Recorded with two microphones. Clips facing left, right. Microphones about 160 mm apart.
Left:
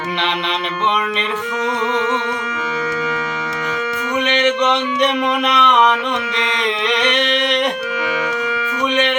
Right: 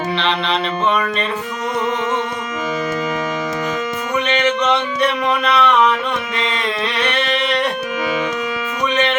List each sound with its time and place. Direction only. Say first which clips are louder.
0.2 s music: right 1 dB; 15° left (ahead or behind)
4.3 s music: left 1 dB; 20° left (ahead or behind)
6.8 s a sound: left 3 dB; 15° left (ahead or behind)